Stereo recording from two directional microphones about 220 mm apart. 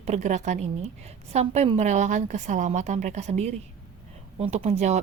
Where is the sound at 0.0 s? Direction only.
30° right (ahead or behind).